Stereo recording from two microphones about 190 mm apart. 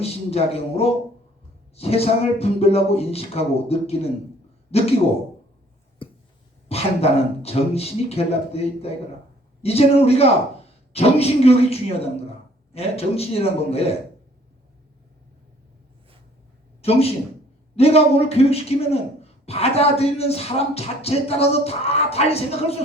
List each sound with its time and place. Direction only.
0.0 s a man's voice: 30° left (ahead or behind)
6.0 s a sound: 30° left (ahead or behind)
6.7 s speech: 30° left (ahead or behind)
16.8 s a man's voice: 30° left (ahead or behind)